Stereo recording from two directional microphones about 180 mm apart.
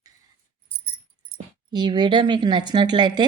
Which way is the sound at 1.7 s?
25° right (ahead or behind).